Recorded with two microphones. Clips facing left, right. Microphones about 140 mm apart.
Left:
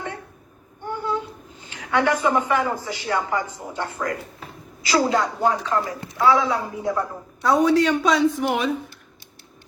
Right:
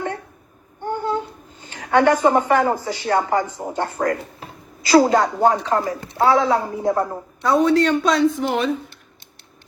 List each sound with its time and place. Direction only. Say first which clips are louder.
0.9 s a sound: right 3 dB; 40° right (ahead or behind)
1.7 s a man's voice: right 5 dB; 45° right (ahead or behind)
7.4 s a woman's voice: right 1 dB; 5° left (ahead or behind)